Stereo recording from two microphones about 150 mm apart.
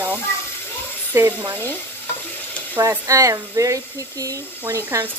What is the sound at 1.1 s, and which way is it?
Speech, 20° right (ahead or behind).